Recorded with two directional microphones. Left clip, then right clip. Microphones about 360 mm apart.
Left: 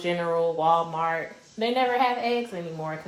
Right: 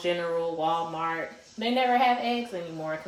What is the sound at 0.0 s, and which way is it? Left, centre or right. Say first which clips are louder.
Speech: left 3 dB; centre.